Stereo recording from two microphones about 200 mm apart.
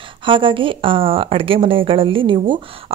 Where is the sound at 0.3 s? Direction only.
25° right (ahead or behind).